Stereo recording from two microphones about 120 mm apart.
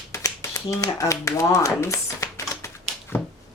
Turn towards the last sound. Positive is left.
turn(degrees=20)  # may be behind; listen again after turning